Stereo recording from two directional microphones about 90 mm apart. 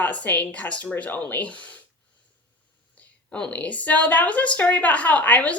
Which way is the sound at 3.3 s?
15° left (ahead or behind).